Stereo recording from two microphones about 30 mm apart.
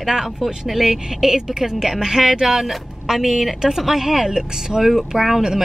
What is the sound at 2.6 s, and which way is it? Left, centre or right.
A woman's voice, centre.